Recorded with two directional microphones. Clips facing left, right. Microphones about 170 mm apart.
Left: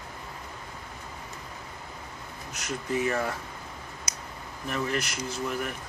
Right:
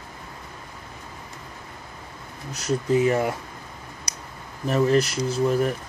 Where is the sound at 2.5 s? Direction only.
30° right (ahead or behind).